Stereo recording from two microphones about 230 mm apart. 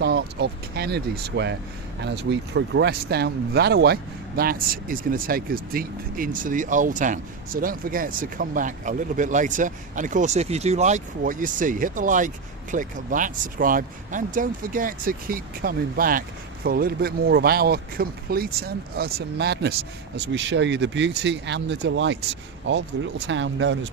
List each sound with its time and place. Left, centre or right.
0.0 s speech: right